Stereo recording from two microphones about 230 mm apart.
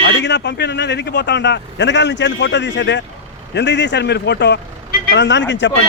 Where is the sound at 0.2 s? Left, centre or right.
Left.